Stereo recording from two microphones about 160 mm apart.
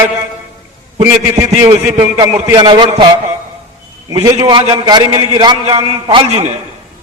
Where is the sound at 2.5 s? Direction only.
25° right (ahead or behind).